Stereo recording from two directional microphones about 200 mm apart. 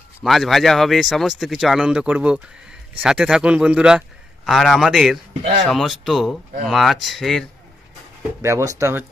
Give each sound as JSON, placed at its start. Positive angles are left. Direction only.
{"t": 0.2, "sound": "speech", "side_deg": 0}
{"t": 8.4, "sound": "speech", "side_deg": -15}